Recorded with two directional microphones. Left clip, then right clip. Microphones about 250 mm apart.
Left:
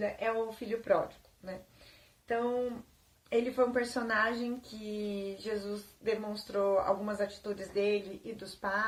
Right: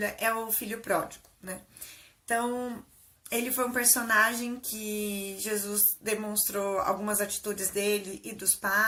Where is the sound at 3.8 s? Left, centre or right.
Centre.